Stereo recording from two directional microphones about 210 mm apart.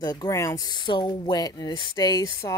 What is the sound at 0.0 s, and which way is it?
Speech, 15° left (ahead or behind).